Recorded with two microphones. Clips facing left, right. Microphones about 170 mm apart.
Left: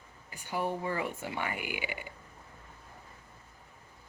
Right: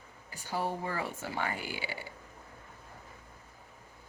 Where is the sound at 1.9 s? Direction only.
35° right (ahead or behind).